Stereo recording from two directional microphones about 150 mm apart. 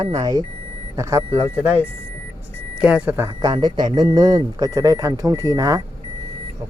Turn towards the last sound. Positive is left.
turn(degrees=-25)  # may be behind; listen again after turning